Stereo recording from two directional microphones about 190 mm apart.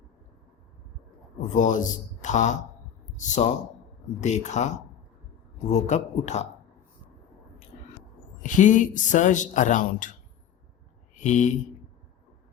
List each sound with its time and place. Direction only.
1.5 s speech: 40° left (ahead or behind)
5.7 s speech: 35° left (ahead or behind)
8.4 s speech: 40° left (ahead or behind)
11.1 s a sound: 40° left (ahead or behind)